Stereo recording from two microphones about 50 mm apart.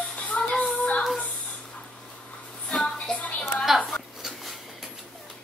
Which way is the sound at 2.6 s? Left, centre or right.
Centre.